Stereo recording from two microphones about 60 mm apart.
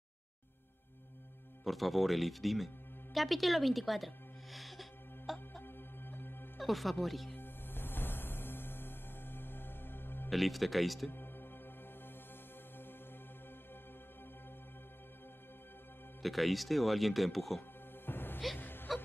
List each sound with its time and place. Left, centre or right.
1.6 s speech: centre
3.2 s music: centre
5.6 s music: left
6.6 s speech: centre
7.3 s music: left
10.3 s speech: centre
11.1 s music: left
16.2 s speech: centre
18.0 s music: left